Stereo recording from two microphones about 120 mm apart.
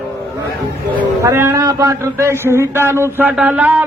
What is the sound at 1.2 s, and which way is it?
A man's voice, 20° right (ahead or behind).